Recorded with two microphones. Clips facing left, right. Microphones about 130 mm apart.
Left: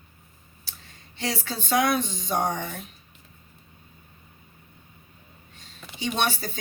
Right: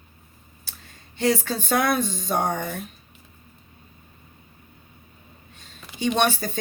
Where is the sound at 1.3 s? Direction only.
50° right (ahead or behind).